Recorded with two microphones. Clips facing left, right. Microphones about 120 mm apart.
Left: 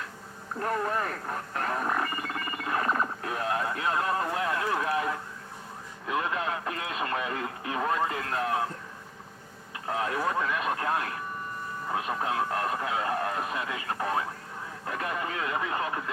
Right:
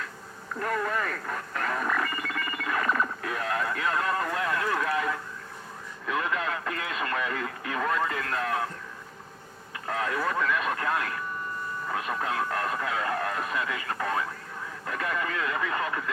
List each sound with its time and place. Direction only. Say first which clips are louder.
0.6 s speech: even; 30° left (ahead or behind)
6.1 s radio: even; 25° left (ahead or behind)
9.8 s speech: even; 25° left (ahead or behind)